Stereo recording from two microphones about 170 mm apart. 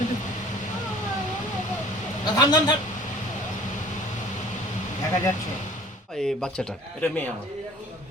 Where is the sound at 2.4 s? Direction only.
25° left (ahead or behind).